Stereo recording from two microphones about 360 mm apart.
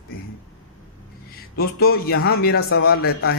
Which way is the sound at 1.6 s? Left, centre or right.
Left.